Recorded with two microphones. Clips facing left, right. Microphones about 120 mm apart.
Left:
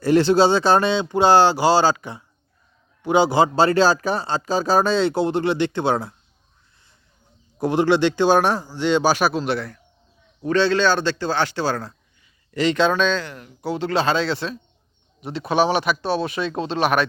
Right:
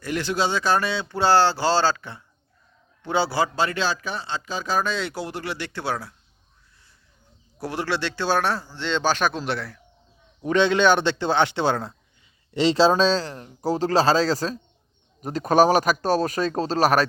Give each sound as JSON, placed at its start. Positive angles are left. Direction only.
{"t": 0.0, "sound": "a man's voice", "side_deg": 30}
{"t": 7.6, "sound": "speech", "side_deg": 20}
{"t": 10.4, "sound": "a man's voice", "side_deg": -15}